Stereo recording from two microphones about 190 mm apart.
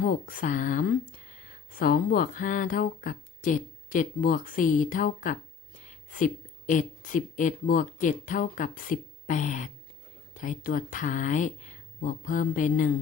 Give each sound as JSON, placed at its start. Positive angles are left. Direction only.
{"t": 0.0, "sound": "a woman's voice", "side_deg": 50}